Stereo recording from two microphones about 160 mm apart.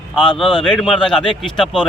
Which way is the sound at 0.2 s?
Centre (ahead or behind).